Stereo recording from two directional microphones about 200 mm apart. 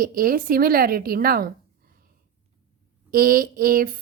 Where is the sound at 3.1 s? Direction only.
45° right (ahead or behind).